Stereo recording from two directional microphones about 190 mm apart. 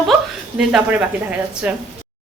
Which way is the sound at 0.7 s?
10° right (ahead or behind).